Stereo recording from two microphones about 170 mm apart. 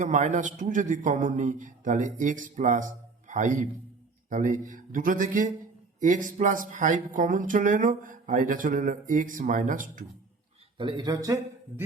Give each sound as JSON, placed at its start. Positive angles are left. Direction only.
{"t": 0.0, "sound": "speech", "side_deg": -45}
{"t": 10.8, "sound": "speech", "side_deg": -25}